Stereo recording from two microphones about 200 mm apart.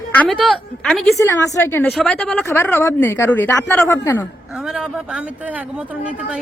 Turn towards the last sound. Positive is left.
turn(degrees=-5)  # may be behind; listen again after turning